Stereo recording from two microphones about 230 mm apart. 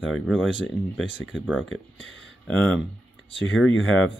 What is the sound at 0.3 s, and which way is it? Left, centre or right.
Speech, left.